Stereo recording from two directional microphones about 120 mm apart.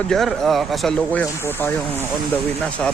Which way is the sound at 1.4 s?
20° left (ahead or behind).